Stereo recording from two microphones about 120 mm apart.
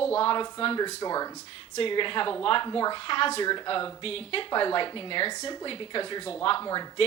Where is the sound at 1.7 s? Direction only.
45° left (ahead or behind).